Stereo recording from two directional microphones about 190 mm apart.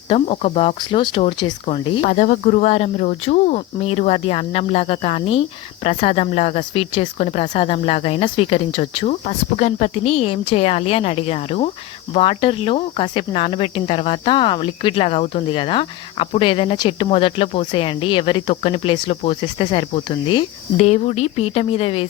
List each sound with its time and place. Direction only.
0.1 s speech: 35° left (ahead or behind)